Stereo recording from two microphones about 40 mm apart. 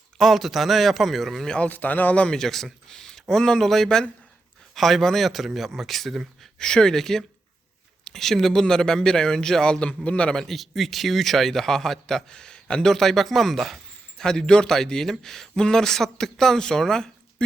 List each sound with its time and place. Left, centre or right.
0.2 s speech: centre
1.7 s speech: left
2.3 s a man's voice: centre
6.6 s a man's voice: centre
9.8 s a man's voice: left
10.3 s a man's voice: centre; by 12.9 s left
12.9 s speech: centre
14.2 s a man's voice: centre